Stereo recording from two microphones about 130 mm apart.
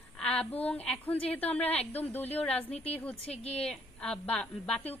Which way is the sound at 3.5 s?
10° left (ahead or behind).